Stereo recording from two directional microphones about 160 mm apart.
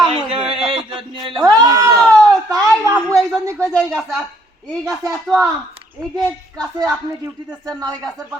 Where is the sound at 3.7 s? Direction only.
5° left (ahead or behind).